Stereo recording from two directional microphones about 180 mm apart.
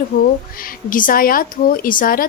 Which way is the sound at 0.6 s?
50° left (ahead or behind).